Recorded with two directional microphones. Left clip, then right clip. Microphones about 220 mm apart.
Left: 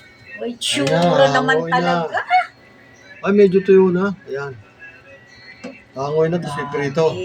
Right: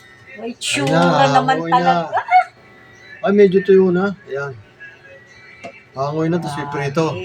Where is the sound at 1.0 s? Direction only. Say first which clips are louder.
Even; 20° right (ahead or behind).